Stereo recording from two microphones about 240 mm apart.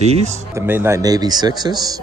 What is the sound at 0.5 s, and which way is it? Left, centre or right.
Speech, centre.